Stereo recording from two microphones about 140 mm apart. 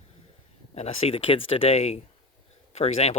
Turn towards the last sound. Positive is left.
turn(degrees=50)  # may be behind; listen again after turning